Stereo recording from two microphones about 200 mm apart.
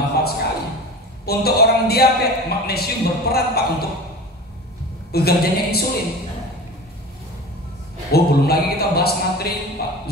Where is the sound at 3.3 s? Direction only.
50° left (ahead or behind).